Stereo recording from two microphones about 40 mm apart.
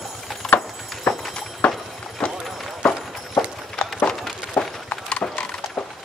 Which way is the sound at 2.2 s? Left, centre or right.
Left.